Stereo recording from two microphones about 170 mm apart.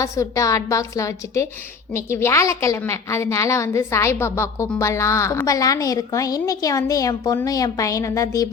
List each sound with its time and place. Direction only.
0.0 s a woman's voice: 20° left (ahead or behind)